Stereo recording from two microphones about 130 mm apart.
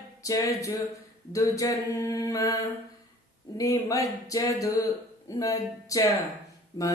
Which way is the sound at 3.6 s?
25° left (ahead or behind).